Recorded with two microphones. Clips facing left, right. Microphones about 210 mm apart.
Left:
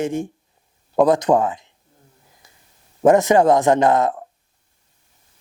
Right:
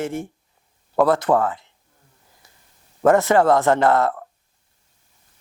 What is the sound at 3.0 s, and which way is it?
A man's voice, 15° left (ahead or behind).